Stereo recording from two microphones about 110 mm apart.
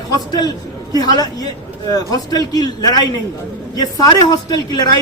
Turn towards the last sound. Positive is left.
turn(degrees=40)  # may be behind; listen again after turning